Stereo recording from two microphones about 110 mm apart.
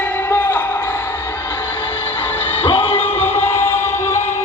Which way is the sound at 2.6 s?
55° left (ahead or behind).